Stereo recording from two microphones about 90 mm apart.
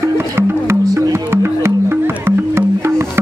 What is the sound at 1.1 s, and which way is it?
Music, 30° right (ahead or behind).